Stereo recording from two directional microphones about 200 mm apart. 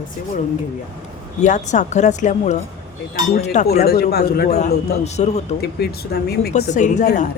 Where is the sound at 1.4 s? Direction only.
35° left (ahead or behind).